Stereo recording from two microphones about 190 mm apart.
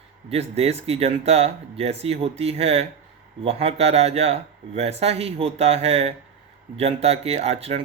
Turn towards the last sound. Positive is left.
turn(degrees=-30)  # may be behind; listen again after turning